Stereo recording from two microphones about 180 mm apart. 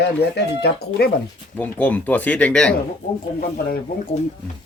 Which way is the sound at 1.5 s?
10° left (ahead or behind).